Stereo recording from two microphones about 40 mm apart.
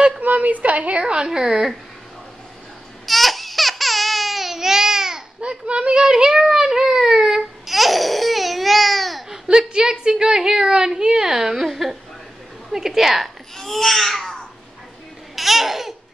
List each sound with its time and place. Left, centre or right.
0.2 s a woman's voice: right; by 1.8 s centre
3.1 s baby cry: centre
5.4 s a child's voice: right
6.4 s a sound: centre
7.6 s babbling: centre
9.3 s a woman's voice: centre
15.3 s babbling: centre